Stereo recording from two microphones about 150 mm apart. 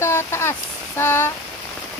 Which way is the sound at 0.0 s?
15° left (ahead or behind).